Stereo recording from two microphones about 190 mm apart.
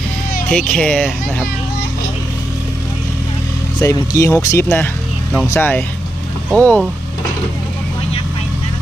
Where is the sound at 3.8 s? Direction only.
15° left (ahead or behind).